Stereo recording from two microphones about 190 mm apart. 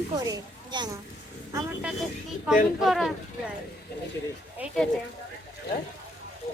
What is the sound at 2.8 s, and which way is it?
Speech, centre (ahead or behind).